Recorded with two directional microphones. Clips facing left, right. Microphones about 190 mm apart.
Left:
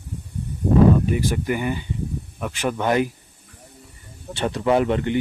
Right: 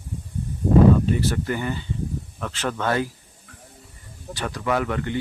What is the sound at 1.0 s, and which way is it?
Speech, 15° left (ahead or behind).